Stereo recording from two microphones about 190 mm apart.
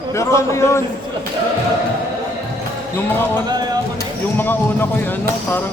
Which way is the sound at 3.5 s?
20° right (ahead or behind).